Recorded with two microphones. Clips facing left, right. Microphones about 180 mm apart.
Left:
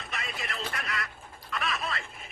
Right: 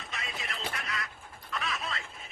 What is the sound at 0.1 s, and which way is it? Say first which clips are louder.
Radio: left 3 dB; 70° left (ahead or behind).